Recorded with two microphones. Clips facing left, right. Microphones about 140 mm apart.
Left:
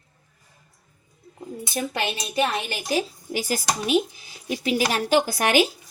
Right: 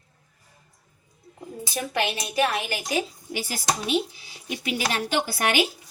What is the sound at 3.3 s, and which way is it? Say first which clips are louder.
Speech: left 2 dB; 45° left (ahead or behind).